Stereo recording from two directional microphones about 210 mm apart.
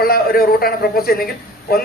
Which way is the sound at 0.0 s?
45° left (ahead or behind).